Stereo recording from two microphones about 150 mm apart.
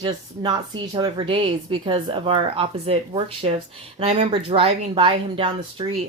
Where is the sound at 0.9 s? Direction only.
30° right (ahead or behind).